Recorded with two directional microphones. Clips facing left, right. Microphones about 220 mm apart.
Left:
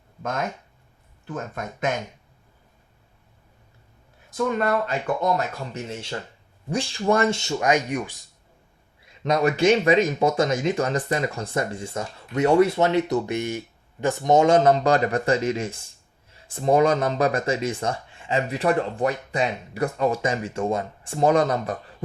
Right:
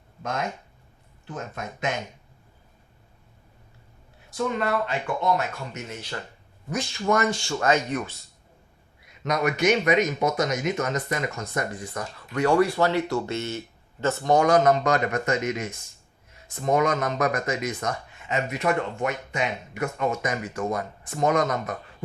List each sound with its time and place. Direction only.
4.5 s speech: 45° left (ahead or behind)
5.7 s speech: 30° left (ahead or behind)
9.2 s speech: 30° left (ahead or behind)